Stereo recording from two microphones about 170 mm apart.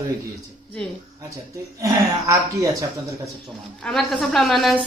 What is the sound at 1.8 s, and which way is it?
Speech, 20° right (ahead or behind).